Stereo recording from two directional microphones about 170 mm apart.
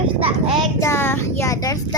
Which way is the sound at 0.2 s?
30° right (ahead or behind).